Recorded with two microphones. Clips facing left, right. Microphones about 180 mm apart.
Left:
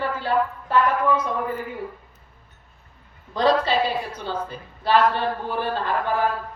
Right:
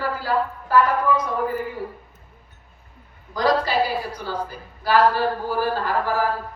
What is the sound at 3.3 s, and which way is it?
A woman's voice, 25° left (ahead or behind).